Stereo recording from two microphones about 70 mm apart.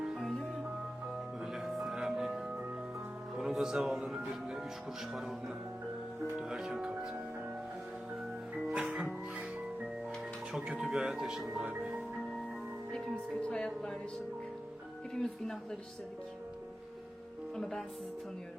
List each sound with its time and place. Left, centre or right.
1.5 s music: centre
6.4 s music: centre
8.5 s music: centre
10.8 s speech: centre
11.7 s music: centre
13.4 s speech: centre
15.1 s speech: centre
17.5 s speech: centre